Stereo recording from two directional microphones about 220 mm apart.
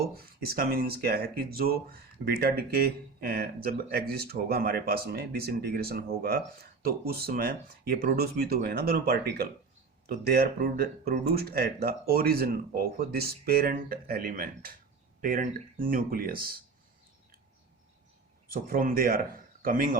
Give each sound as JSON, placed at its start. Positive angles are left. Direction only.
{"t": 0.0, "sound": "speech", "side_deg": -45}
{"t": 18.4, "sound": "a man's voice", "side_deg": -40}